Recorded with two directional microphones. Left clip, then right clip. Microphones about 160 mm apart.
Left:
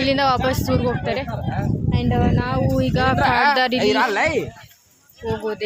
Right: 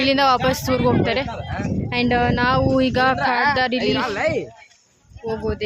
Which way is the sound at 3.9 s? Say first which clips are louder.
Left 3 dB; 90° left.